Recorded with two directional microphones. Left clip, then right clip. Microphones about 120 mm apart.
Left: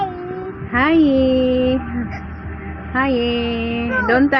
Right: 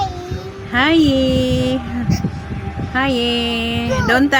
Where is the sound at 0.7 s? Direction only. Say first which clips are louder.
Right 1 dB; 40° right (ahead or behind).